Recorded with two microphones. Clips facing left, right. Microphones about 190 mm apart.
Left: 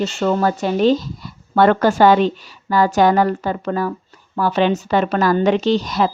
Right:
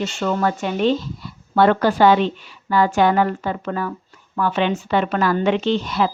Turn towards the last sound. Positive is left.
turn(degrees=40)  # may be behind; listen again after turning